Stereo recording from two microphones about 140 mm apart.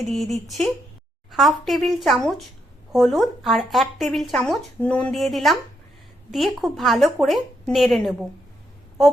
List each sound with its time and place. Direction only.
0.1 s speech: centre (ahead or behind)